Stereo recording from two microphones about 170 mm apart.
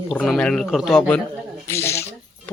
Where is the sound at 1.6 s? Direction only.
15° left (ahead or behind).